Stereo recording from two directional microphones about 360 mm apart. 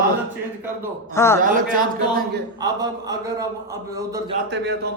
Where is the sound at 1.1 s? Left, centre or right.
Centre.